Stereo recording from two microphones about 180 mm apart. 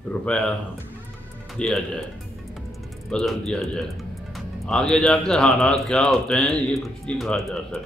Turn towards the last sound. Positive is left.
turn(degrees=0)  # may be behind; listen again after turning